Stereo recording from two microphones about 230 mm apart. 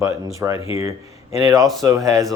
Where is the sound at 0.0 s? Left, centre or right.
Centre.